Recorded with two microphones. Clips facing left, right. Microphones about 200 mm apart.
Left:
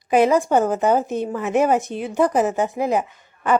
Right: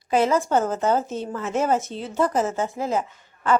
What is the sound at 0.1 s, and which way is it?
A woman's voice, 15° left (ahead or behind).